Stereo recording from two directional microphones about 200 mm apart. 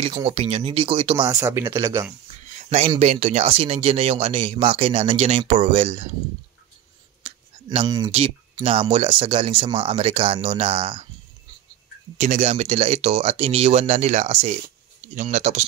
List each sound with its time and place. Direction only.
0.0 s speech: 30° right (ahead or behind)
1.2 s speech: 15° right (ahead or behind)
2.5 s speech: 30° right (ahead or behind)
7.2 s a sound: 25° right (ahead or behind)
8.5 s speech: 30° right (ahead or behind)
12.2 s speech: 35° right (ahead or behind)